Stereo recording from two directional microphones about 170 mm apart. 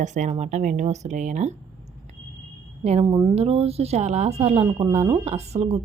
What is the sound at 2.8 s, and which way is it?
Speech, 35° right (ahead or behind).